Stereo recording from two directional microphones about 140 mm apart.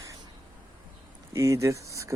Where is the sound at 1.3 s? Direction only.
20° right (ahead or behind).